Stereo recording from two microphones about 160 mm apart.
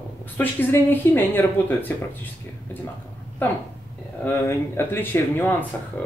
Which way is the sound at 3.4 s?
10° left (ahead or behind).